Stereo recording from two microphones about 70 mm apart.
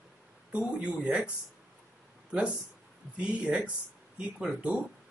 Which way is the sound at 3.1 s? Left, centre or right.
Centre.